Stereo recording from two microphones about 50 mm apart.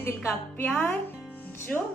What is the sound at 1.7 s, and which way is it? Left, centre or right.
Speech, left.